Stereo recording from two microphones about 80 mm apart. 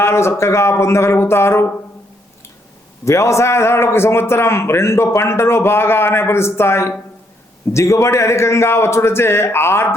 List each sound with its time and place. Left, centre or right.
0.0 s a man's voice: left
3.0 s a man's voice: left